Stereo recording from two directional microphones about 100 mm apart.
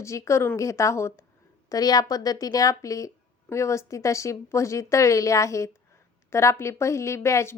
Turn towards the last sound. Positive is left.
turn(degrees=30)  # may be behind; listen again after turning